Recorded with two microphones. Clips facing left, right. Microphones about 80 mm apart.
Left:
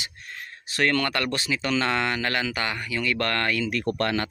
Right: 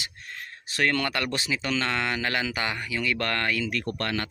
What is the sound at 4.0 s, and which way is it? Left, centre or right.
Speech, left.